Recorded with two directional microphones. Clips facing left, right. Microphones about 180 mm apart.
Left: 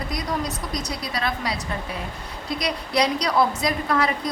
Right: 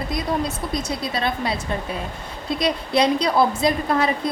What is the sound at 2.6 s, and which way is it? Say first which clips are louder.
A woman's voice: right 4 dB; 25° right (ahead or behind).